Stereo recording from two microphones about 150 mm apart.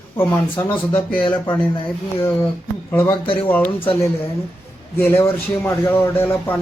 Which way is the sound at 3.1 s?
35° left (ahead or behind).